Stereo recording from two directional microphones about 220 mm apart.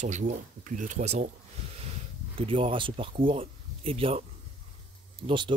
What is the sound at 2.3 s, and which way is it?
Speech, 25° right (ahead or behind).